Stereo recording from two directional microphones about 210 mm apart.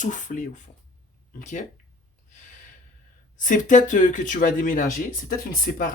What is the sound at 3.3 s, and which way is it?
Speech, 35° left (ahead or behind).